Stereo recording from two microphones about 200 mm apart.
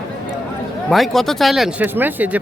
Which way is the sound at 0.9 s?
Centre (ahead or behind).